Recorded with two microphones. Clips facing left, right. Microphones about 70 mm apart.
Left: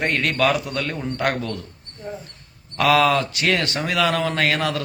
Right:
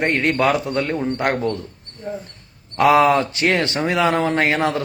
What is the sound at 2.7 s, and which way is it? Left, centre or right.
Speech, right.